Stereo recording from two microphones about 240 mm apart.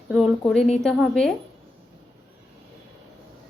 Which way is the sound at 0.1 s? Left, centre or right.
Centre.